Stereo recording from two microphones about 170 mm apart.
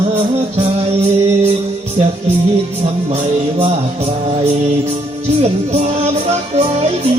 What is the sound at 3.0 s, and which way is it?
Music, 35° right (ahead or behind).